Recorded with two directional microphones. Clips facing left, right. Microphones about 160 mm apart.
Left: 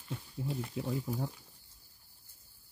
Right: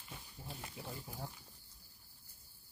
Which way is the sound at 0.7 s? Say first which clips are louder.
Left 13 dB; 90° left.